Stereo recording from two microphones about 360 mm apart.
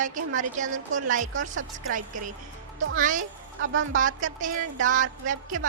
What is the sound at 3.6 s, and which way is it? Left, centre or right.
Speech, right.